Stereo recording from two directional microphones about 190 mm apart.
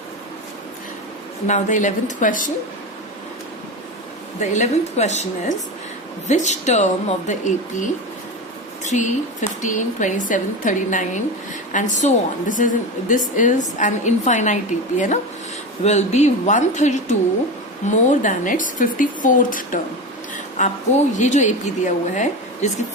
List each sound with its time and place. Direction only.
1.5 s a woman's voice: 40° left (ahead or behind)
4.4 s a woman's voice: 35° left (ahead or behind)
21.2 s a woman's voice: 40° left (ahead or behind)